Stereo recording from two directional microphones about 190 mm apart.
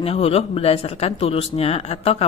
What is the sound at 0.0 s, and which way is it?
Speech, 30° left (ahead or behind).